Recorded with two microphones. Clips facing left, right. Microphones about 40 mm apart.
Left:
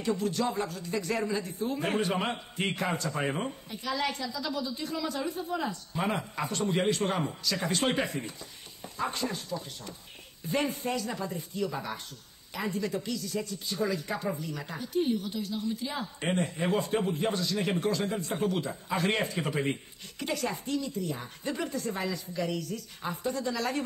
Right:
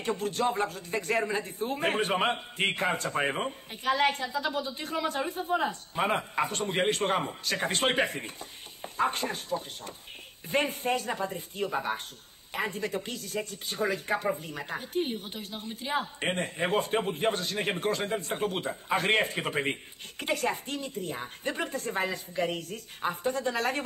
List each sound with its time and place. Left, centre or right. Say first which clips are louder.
0.0 s speech: right 1 dB; right
3.8 s speech: right 5 dB; right